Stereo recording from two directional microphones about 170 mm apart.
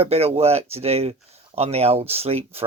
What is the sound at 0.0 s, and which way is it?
Speech, 35° right (ahead or behind).